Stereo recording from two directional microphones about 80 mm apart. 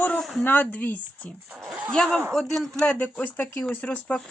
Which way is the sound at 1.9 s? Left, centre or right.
Centre.